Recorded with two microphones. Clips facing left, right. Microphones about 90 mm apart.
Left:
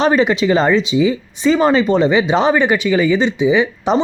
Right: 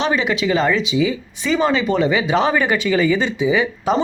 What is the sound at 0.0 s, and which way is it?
Speech, 40° left (ahead or behind).